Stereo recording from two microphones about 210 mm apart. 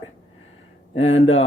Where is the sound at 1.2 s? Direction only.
30° left (ahead or behind).